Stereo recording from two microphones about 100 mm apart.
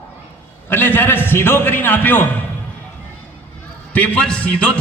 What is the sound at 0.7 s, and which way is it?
A man's voice, 20° left (ahead or behind).